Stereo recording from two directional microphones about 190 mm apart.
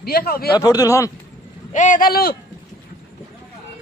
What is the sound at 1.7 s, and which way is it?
Speech, 40° left (ahead or behind).